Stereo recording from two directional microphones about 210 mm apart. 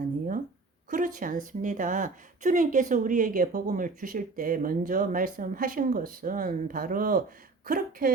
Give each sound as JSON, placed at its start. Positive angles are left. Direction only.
{"t": 0.9, "sound": "a woman's voice", "side_deg": -40}